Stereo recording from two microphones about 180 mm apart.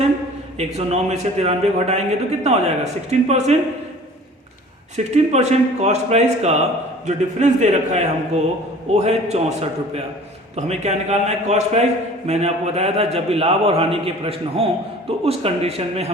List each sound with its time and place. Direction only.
0.6 s a man's voice: 35° right (ahead or behind)
4.9 s a man's voice: 40° right (ahead or behind)